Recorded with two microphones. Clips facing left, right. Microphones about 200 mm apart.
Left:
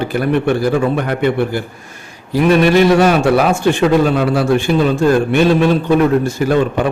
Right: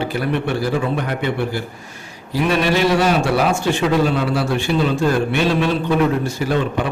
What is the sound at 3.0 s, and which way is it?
A man's voice, 55° left (ahead or behind).